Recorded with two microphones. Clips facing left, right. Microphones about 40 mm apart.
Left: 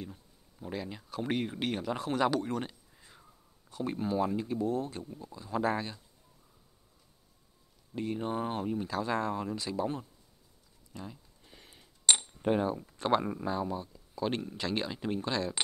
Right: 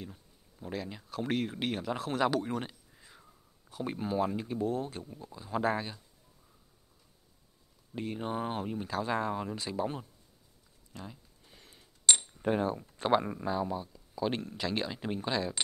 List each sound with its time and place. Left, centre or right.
0.0 s speech: centre
7.9 s speech: centre
11.5 s a sound: centre
12.2 s coin: centre
13.0 s speech: centre